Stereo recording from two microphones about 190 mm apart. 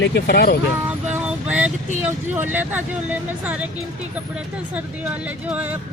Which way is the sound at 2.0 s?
10° right (ahead or behind).